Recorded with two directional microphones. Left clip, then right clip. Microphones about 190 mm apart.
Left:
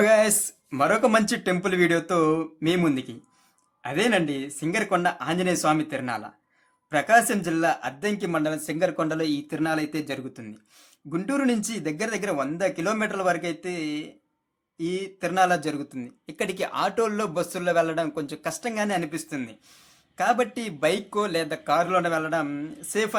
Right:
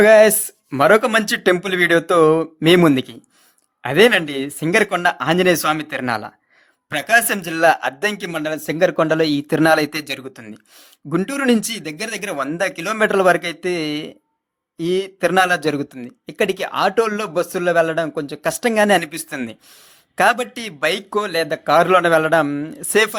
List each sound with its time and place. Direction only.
0.0 s speech: 30° right (ahead or behind)
9.5 s speech: 50° right (ahead or behind); by 18.3 s 25° right (ahead or behind)
18.4 s speech: 40° right (ahead or behind)
20.6 s speech: 35° right (ahead or behind)
21.8 s speech: 45° right (ahead or behind)
22.9 s speech: 45° right (ahead or behind)